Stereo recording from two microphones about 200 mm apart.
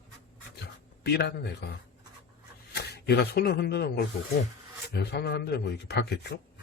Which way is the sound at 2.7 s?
55° left (ahead or behind).